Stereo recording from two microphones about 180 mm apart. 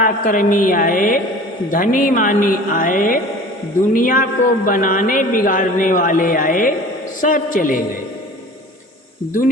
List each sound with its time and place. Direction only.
0.0 s speech: 50° left (ahead or behind)